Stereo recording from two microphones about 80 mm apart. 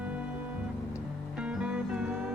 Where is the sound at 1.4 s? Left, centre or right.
Centre.